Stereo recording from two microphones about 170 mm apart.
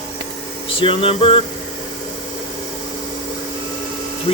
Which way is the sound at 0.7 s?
30° left (ahead or behind).